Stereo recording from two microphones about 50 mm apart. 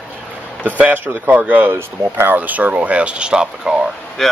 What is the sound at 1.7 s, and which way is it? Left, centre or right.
Speech, right.